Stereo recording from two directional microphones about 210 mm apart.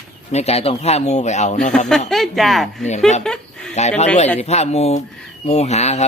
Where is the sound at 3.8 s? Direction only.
35° left (ahead or behind).